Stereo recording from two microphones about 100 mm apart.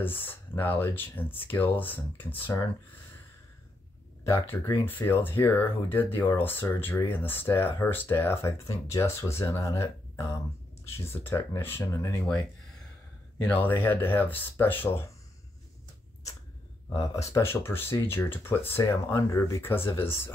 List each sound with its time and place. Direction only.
0.0 s speech: 20° left (ahead or behind)
4.2 s speech: 30° left (ahead or behind)
4.8 s speech: 20° left (ahead or behind)
11.8 s speech: 35° left (ahead or behind)
13.4 s speech: 20° left (ahead or behind)
16.9 s speech: 30° left (ahead or behind)